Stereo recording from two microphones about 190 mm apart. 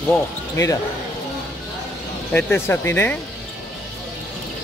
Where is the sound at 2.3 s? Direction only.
10° left (ahead or behind).